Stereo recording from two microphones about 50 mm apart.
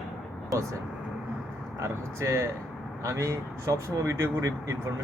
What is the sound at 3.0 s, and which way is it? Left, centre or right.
Speech, right.